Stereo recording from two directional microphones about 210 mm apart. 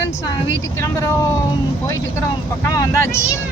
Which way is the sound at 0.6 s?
15° left (ahead or behind).